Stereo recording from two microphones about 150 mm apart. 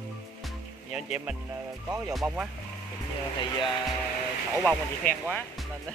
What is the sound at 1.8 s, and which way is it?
Speech, 20° right (ahead or behind).